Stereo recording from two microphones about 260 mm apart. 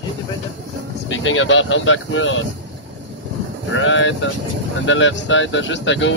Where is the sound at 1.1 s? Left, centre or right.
Left.